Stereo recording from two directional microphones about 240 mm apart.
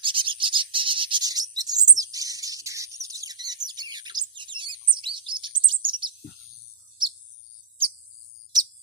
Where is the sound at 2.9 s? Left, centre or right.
Centre.